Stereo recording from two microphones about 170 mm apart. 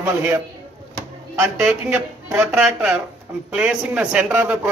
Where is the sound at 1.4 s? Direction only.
5° right (ahead or behind).